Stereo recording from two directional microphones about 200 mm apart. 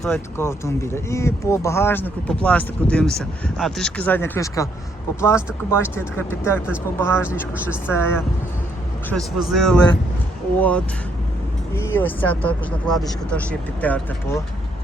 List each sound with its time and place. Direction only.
0.0 s speech: 10° left (ahead or behind)
9.0 s speech: centre (ahead or behind)